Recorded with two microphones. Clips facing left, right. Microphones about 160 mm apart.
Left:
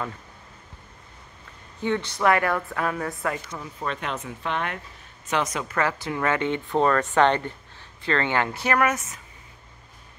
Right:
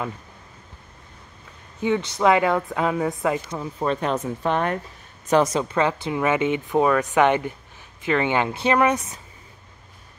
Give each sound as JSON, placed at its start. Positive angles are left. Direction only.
{"t": 1.8, "sound": "a woman's voice", "side_deg": -15}